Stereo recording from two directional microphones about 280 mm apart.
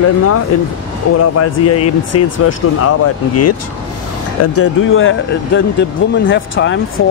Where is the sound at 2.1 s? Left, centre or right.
Left.